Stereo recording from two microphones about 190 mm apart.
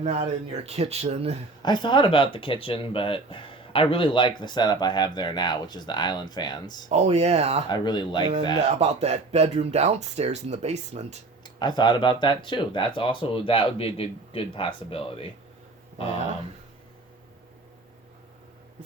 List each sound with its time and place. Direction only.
0.0 s speech: 35° right (ahead or behind)
1.6 s speech: 25° left (ahead or behind)
6.8 s speech: 35° right (ahead or behind)
7.7 s speech: 20° left (ahead or behind)
8.8 s speech: 35° right (ahead or behind)
11.4 s speech: 25° left (ahead or behind)